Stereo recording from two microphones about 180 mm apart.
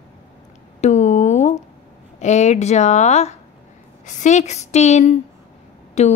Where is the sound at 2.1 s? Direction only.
40° left (ahead or behind).